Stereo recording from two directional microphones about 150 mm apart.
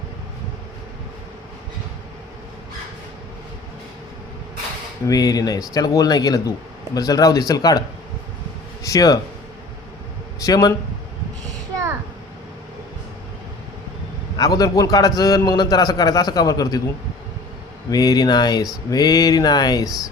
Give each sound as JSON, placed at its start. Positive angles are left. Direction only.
{"t": 5.0, "sound": "a man's voice", "side_deg": 25}
{"t": 8.8, "sound": "speech", "side_deg": 25}
{"t": 10.4, "sound": "a man's voice", "side_deg": 25}
{"t": 14.3, "sound": "a man's voice", "side_deg": 25}
{"t": 17.9, "sound": "a man's voice", "side_deg": 25}